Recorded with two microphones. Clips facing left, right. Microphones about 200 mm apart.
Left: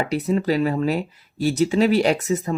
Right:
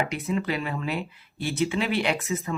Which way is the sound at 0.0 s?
40° left (ahead or behind).